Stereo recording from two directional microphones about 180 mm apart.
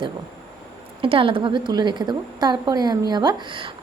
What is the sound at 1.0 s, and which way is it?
A woman's voice, 30° right (ahead or behind).